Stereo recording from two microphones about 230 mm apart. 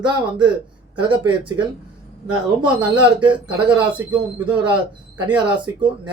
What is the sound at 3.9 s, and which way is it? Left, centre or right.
Speech, centre.